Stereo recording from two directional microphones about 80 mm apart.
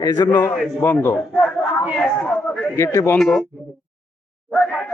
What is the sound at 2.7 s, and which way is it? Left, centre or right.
Speech, left.